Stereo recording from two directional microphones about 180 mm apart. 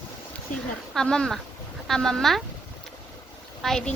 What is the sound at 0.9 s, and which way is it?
Speech, 5° left (ahead or behind).